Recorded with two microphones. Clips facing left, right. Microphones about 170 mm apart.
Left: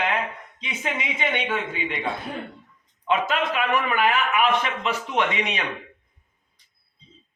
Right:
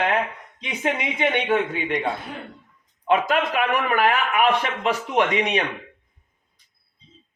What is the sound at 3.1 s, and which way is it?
A man's voice, 50° right (ahead or behind).